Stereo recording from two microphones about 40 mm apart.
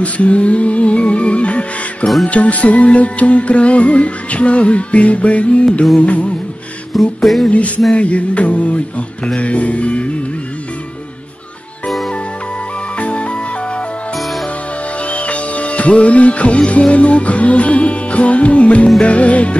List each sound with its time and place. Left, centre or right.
0.0 s music: left
6.9 s music: centre
7.4 s music: left
13.0 s music: left
15.0 s music: left